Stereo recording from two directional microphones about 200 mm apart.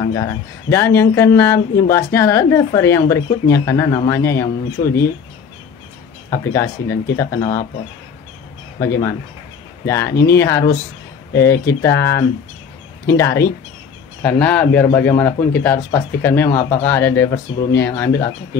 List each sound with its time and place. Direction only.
0.1 s speech: 15° left (ahead or behind)
4.8 s speech: 30° left (ahead or behind)
6.5 s speech: 15° left (ahead or behind)
7.3 s speech: 40° left (ahead or behind)
8.7 s speech: 15° left (ahead or behind)